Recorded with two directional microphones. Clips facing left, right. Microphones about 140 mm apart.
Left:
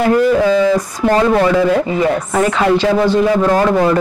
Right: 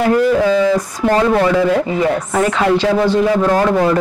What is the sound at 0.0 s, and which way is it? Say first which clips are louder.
Speech: left 1 dB; 20° left (ahead or behind).